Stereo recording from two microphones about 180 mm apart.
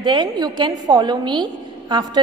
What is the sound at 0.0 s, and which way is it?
A woman's voice, 25° right (ahead or behind).